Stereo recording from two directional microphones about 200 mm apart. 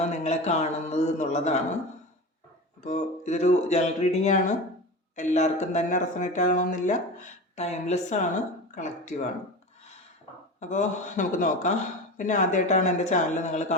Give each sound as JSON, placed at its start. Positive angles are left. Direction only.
{"t": 0.0, "sound": "speech", "side_deg": 35}
{"t": 2.8, "sound": "speech", "side_deg": 35}
{"t": 10.6, "sound": "speech", "side_deg": 35}